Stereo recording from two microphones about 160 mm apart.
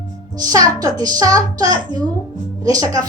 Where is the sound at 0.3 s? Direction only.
25° right (ahead or behind).